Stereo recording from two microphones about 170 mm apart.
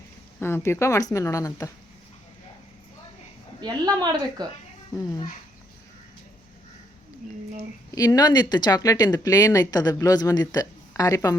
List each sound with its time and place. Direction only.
0.3 s speech: 15° left (ahead or behind)
3.6 s a woman's voice: 25° right (ahead or behind)
7.9 s speech: 20° left (ahead or behind)